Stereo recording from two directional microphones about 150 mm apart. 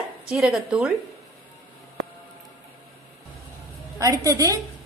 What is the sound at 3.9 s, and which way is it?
Speech, 20° right (ahead or behind).